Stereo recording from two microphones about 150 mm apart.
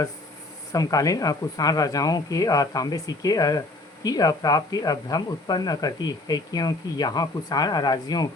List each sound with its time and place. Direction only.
0.7 s speech: 25° left (ahead or behind)